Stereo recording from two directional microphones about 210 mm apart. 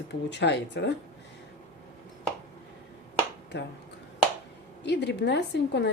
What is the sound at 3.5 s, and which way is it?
Speech, 55° left (ahead or behind).